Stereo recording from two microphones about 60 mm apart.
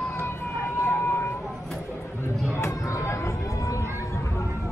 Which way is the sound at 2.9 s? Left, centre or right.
Left.